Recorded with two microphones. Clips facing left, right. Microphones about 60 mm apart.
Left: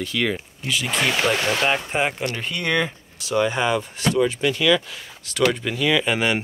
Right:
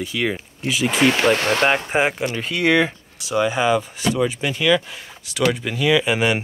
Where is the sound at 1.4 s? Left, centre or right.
Right.